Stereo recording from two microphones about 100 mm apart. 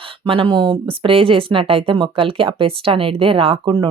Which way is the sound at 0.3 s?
60° right (ahead or behind).